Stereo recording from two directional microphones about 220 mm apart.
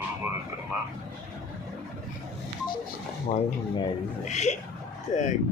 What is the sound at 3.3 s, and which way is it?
Speech, 35° left (ahead or behind).